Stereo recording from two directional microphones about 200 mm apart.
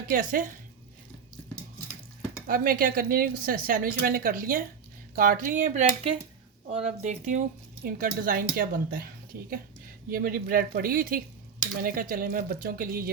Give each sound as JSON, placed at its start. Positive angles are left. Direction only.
{"t": 0.1, "sound": "a woman's voice", "side_deg": -45}
{"t": 2.5, "sound": "a woman's voice", "side_deg": -45}